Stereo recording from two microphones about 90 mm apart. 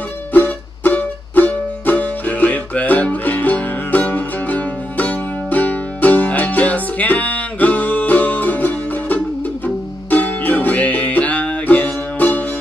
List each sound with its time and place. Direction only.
0.3 s music: 20° left (ahead or behind)